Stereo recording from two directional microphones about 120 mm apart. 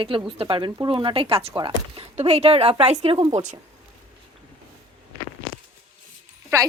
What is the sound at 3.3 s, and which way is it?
Speech, 90° right.